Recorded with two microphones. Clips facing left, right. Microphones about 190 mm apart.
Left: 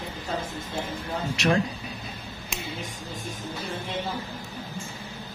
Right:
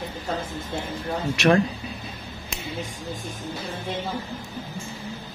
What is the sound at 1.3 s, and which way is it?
Speech, 65° right (ahead or behind).